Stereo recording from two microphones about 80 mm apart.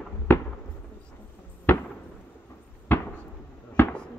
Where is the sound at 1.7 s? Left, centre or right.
Left.